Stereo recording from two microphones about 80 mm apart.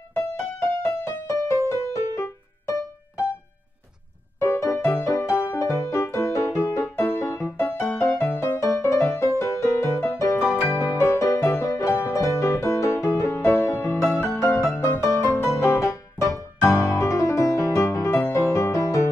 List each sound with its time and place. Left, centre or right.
0.1 s music: left
4.4 s music: left